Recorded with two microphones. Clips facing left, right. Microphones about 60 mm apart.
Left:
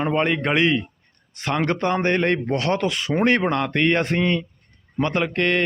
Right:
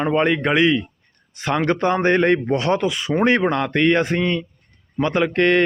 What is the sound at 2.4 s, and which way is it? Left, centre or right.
A man's voice, right.